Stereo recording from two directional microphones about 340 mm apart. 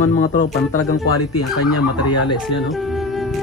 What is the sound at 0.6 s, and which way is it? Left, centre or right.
Speech, left.